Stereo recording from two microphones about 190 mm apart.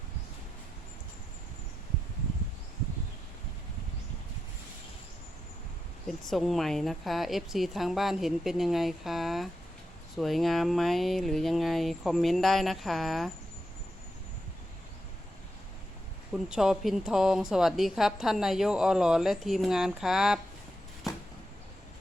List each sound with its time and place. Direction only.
6.1 s a woman's voice: centre (ahead or behind)
16.3 s a woman's voice: centre (ahead or behind)